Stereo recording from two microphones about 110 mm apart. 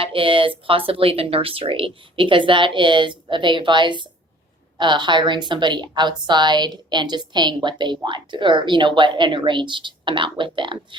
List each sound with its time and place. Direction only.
0.0 s a woman's voice: 55° right (ahead or behind)